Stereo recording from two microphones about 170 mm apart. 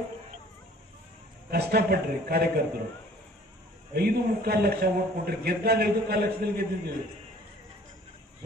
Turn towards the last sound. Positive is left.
turn(degrees=-65)  # may be behind; listen again after turning